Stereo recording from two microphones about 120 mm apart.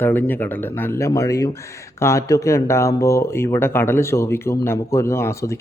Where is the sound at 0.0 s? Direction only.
15° left (ahead or behind).